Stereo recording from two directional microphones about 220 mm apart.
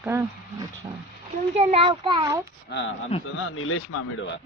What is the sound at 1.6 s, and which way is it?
Speech, 25° right (ahead or behind).